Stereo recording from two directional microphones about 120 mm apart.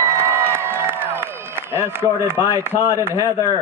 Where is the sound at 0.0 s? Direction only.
20° right (ahead or behind).